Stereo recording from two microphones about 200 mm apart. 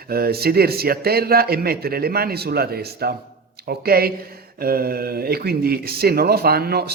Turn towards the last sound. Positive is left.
turn(degrees=-50)  # may be behind; listen again after turning